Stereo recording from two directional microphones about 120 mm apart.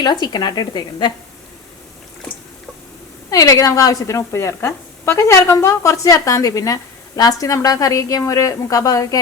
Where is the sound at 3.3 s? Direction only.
30° left (ahead or behind).